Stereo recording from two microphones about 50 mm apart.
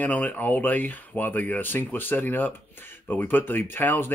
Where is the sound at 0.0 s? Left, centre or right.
Left.